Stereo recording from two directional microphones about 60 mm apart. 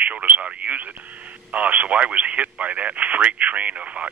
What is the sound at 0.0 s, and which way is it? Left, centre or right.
Speech, right.